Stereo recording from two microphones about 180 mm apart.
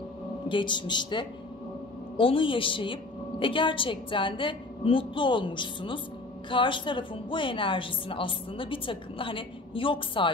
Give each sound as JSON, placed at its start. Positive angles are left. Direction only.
{"t": 0.5, "sound": "a woman's voice", "side_deg": 25}